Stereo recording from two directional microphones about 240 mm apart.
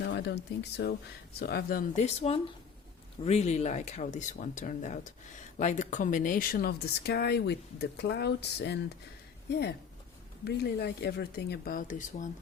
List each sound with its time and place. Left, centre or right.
0.0 s speech: left
10.4 s speech: left